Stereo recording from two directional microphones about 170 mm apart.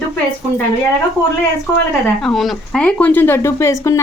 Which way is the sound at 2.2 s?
Centre (ahead or behind).